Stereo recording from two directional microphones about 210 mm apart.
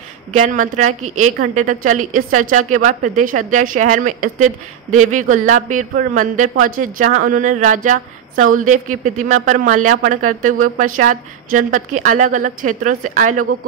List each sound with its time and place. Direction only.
0.3 s speech: 35° right (ahead or behind)